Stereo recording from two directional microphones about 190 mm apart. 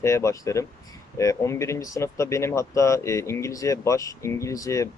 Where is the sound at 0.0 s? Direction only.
15° left (ahead or behind).